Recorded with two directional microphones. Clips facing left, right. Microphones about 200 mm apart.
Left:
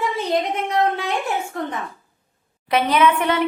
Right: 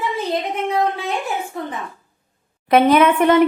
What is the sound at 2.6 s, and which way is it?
Speech, 50° right (ahead or behind).